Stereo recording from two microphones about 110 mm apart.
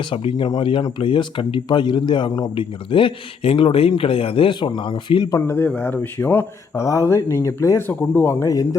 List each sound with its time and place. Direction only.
0.0 s speech: 55° left (ahead or behind)
5.3 s speech: 25° left (ahead or behind)
5.6 s speech: 15° left (ahead or behind)